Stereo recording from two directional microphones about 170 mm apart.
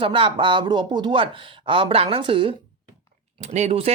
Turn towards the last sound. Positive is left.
turn(degrees=-40)  # may be behind; listen again after turning